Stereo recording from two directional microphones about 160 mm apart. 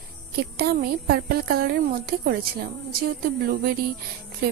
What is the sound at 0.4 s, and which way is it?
A woman's voice, 75° right (ahead or behind).